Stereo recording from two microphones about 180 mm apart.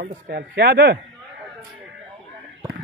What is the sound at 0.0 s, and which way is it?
Speech, 60° right (ahead or behind).